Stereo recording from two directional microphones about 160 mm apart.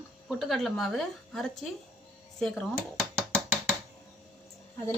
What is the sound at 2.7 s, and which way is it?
Dishes, 15° right (ahead or behind).